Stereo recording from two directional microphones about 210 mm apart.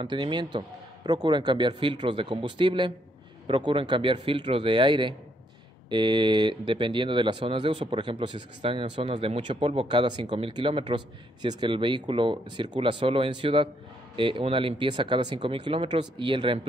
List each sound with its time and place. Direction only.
0.0 s speech: 20° right (ahead or behind)